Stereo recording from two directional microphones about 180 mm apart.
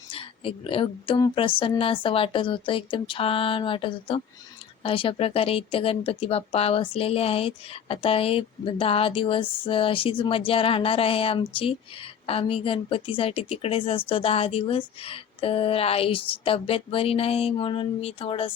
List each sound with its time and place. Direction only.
0.1 s speech: 30° left (ahead or behind)